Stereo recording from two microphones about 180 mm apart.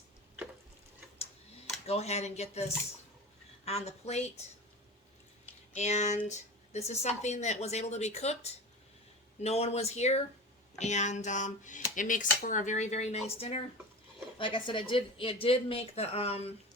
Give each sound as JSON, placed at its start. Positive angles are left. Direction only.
{"t": 1.9, "sound": "speech", "side_deg": 35}
{"t": 3.7, "sound": "speech", "side_deg": 35}
{"t": 5.7, "sound": "speech", "side_deg": 40}